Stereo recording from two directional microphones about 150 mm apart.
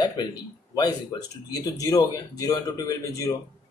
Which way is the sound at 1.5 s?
25° left (ahead or behind).